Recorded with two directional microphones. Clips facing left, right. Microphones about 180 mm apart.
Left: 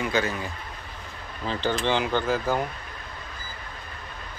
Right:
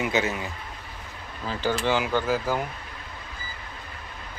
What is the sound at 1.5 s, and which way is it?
Speech, 10° right (ahead or behind).